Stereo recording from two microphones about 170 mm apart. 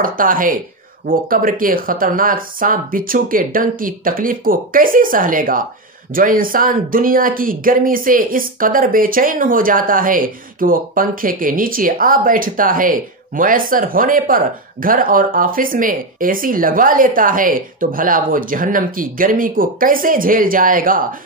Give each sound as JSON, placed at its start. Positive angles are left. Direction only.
{"t": 0.0, "sound": "speech", "side_deg": -55}